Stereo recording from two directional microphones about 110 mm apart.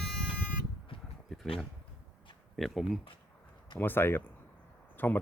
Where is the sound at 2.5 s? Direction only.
Centre (ahead or behind).